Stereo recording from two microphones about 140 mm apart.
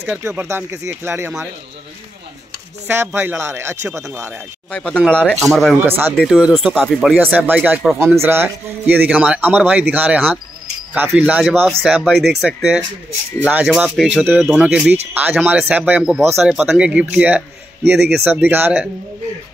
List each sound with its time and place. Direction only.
0.2 s speech: 20° right (ahead or behind)
3.2 s speech: 20° right (ahead or behind)
4.6 s speech: 10° left (ahead or behind)
7.2 s speech: 15° right (ahead or behind)